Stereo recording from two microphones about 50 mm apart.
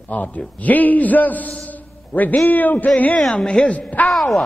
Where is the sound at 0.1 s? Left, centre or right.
Left.